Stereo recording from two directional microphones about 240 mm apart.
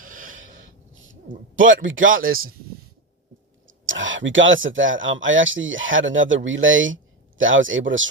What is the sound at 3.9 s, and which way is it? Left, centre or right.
Speech, right.